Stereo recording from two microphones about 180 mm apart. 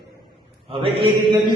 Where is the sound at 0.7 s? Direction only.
30° right (ahead or behind).